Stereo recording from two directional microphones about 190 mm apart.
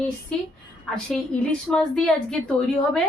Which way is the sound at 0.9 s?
5° left (ahead or behind).